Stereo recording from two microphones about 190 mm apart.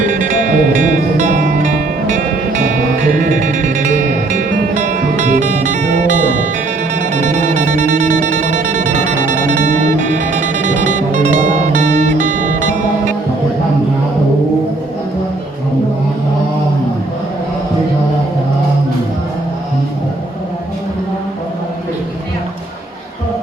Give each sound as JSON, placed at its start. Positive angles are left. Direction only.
{"t": 0.0, "sound": "music", "side_deg": -45}